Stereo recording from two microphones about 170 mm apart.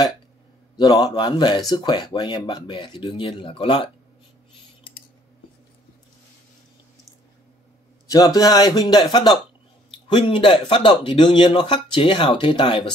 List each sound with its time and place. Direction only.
0.7 s speech: 25° left (ahead or behind)
8.1 s speech: 20° left (ahead or behind)